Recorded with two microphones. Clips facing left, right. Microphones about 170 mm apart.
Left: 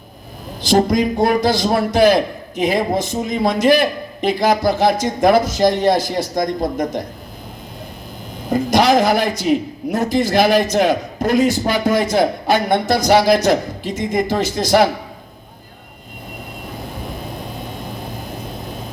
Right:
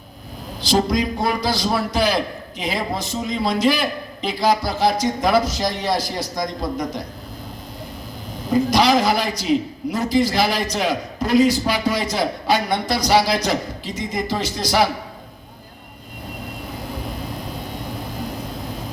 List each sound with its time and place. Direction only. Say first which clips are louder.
0.6 s a man's voice: left 4 dB; 50° left (ahead or behind)
8.4 s a man's voice: left 2 dB; 50° left (ahead or behind)